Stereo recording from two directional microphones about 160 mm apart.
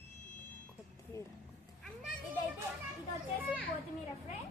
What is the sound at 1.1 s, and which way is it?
Speech, 20° left (ahead or behind).